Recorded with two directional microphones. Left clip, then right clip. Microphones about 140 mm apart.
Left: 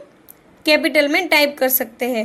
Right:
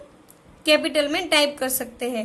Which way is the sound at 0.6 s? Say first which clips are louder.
Left 4 dB; 25° left (ahead or behind).